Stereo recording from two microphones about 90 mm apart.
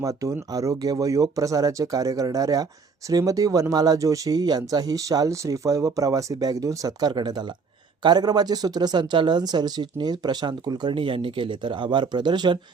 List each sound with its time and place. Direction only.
0.0 s speech: 35° right (ahead or behind)
7.1 s speech: 55° right (ahead or behind)